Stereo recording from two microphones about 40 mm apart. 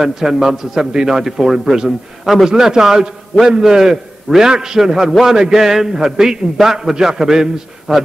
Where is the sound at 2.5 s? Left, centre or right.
Centre.